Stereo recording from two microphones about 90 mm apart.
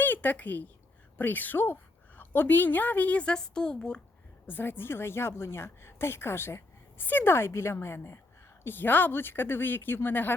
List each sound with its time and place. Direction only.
0.0 s a woman's voice: 20° left (ahead or behind)
4.4 s a woman's voice: 20° left (ahead or behind)